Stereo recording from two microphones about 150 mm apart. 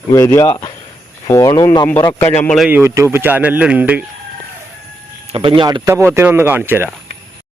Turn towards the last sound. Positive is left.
turn(degrees=-15)  # may be behind; listen again after turning